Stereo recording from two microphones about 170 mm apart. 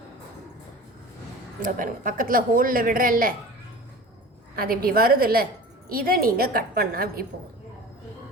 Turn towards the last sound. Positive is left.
turn(degrees=-60)  # may be behind; listen again after turning